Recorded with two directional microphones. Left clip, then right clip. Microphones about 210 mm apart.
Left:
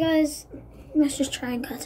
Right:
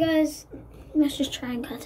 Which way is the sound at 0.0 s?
Centre (ahead or behind).